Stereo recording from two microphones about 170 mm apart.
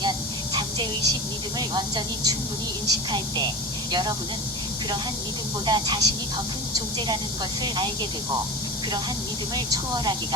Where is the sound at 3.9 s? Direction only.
25° right (ahead or behind).